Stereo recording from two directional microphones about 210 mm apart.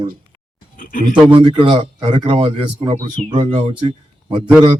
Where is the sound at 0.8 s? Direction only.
40° left (ahead or behind).